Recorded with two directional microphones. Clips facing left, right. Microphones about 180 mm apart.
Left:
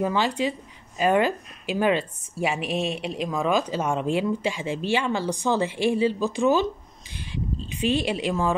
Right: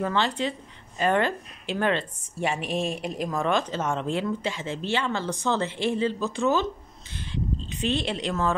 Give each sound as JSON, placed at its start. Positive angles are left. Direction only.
{"t": 0.0, "sound": "a woman's voice", "side_deg": 10}